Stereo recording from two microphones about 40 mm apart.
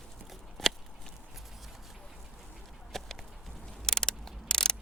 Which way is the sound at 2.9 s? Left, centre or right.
Centre.